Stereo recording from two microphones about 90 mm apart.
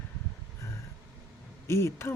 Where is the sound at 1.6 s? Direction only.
30° left (ahead or behind).